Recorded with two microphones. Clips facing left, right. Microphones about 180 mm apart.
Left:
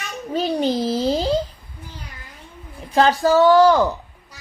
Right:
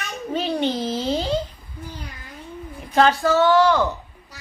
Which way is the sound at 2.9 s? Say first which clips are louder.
Left 2 dB; 35° left (ahead or behind).